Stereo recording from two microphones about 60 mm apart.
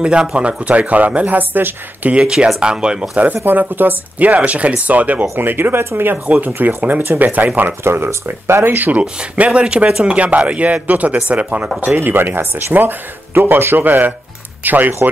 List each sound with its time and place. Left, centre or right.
0.0 s speech: centre
3.4 s speech: right
6.2 s speech: right
7.8 s speech: right
9.0 s speech: centre